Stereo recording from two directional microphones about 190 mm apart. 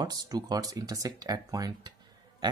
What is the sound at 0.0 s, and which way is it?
Speech, 20° right (ahead or behind).